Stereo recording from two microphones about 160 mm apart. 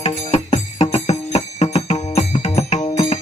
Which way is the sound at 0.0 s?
40° left (ahead or behind).